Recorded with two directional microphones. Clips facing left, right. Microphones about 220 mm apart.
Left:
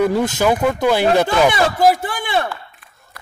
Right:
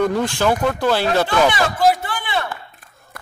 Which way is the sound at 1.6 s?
45° left (ahead or behind).